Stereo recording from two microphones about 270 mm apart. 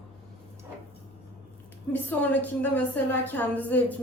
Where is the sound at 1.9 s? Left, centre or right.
Centre.